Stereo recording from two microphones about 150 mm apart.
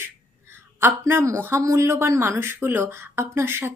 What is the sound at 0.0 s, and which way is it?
Speech, 15° right (ahead or behind).